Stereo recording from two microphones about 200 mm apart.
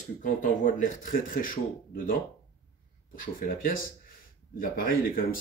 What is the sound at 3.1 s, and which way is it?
Speech, 45° left (ahead or behind).